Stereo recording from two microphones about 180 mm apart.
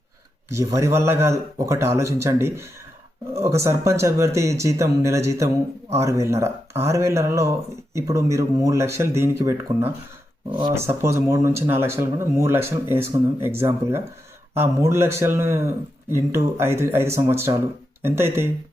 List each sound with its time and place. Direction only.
0.5 s speech: 15° right (ahead or behind)